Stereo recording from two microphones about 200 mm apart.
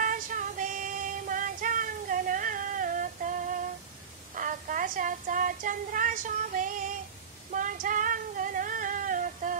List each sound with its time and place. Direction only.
0.0 s music: 40° right (ahead or behind)
4.4 s a sound: 40° right (ahead or behind)
7.5 s female singing: 40° right (ahead or behind)